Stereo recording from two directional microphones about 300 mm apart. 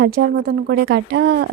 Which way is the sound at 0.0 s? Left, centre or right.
Right.